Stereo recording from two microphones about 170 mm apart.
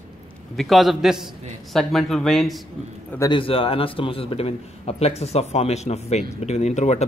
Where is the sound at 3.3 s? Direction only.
30° left (ahead or behind).